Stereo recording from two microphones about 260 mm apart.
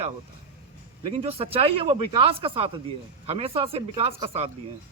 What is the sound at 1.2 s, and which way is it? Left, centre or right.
A man's voice, right.